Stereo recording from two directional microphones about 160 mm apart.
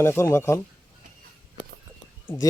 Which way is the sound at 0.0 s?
15° left (ahead or behind).